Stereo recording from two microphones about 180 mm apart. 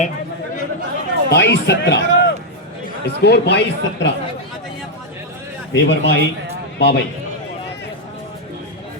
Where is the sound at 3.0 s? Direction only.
65° left (ahead or behind).